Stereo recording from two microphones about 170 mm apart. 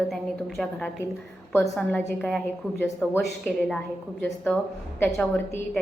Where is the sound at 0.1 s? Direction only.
Centre (ahead or behind).